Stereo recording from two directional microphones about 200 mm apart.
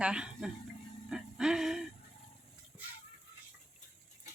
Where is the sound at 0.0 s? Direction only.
5° right (ahead or behind).